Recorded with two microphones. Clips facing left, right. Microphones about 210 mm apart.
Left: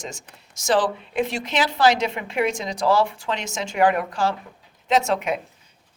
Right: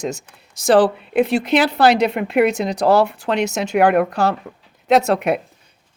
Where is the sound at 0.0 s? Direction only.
65° right (ahead or behind).